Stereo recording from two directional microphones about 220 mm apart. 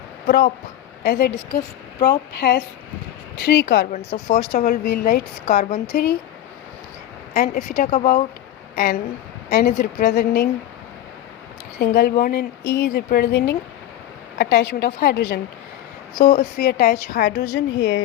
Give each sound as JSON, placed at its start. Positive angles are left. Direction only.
{"t": 0.3, "sound": "speech", "side_deg": 45}
{"t": 3.9, "sound": "speech", "side_deg": 40}
{"t": 7.3, "sound": "a woman's voice", "side_deg": 40}
{"t": 11.8, "sound": "speech", "side_deg": 45}